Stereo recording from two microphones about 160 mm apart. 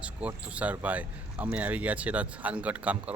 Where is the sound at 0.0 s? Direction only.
10° right (ahead or behind).